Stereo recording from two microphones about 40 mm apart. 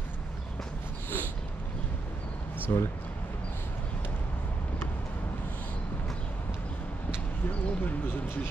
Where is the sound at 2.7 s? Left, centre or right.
Left.